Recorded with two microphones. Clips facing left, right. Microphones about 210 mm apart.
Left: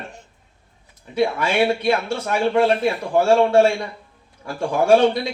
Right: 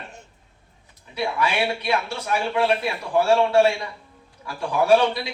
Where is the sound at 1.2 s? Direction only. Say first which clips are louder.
Left 5 dB; 50° left (ahead or behind).